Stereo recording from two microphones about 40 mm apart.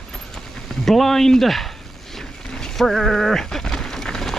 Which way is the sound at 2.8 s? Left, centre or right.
Centre.